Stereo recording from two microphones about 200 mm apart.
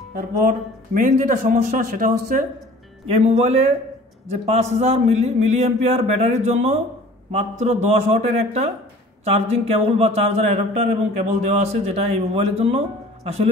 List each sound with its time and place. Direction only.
0.1 s speech: 45° right (ahead or behind)
3.1 s speech: 30° right (ahead or behind)